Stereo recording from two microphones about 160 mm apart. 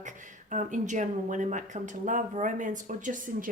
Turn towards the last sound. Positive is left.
turn(degrees=-55)  # may be behind; listen again after turning